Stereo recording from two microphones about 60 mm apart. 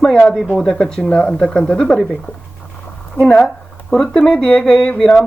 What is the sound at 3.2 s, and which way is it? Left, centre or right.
Speech, centre.